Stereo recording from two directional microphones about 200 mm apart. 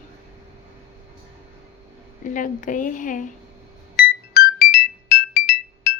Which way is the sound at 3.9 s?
50° left (ahead or behind).